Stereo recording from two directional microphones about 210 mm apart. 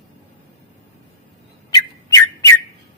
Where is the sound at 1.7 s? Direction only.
15° left (ahead or behind).